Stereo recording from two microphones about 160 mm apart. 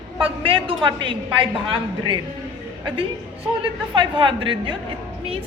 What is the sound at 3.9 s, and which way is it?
Speech, 30° right (ahead or behind).